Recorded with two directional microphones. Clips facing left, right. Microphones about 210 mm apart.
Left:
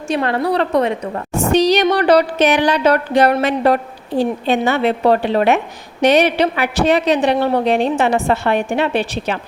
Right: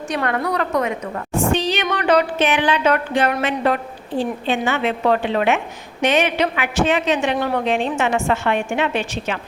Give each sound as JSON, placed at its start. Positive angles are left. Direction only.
{"t": 0.1, "sound": "a woman's voice", "side_deg": 25}